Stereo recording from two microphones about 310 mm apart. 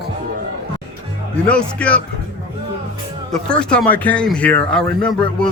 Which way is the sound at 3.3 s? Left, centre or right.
Centre.